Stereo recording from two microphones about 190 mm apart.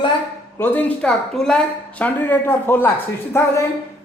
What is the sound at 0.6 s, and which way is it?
A woman's voice, 10° left (ahead or behind).